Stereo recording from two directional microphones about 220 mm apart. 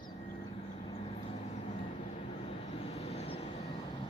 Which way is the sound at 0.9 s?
25° left (ahead or behind).